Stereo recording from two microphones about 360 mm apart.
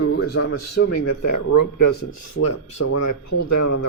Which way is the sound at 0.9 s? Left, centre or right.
Left.